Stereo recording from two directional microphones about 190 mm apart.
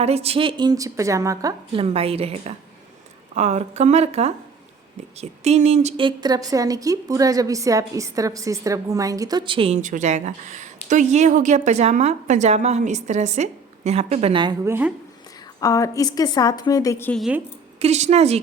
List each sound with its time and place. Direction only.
0.0 s a woman's voice: 35° right (ahead or behind)
1.8 s a woman's voice: 30° right (ahead or behind); by 14.9 s 10° right (ahead or behind)
15.6 s a woman's voice: 15° left (ahead or behind)
17.2 s speech: 5° right (ahead or behind)
17.7 s a woman's voice: 35° right (ahead or behind)